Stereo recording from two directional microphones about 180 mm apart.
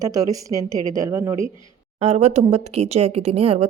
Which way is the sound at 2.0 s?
35° right (ahead or behind).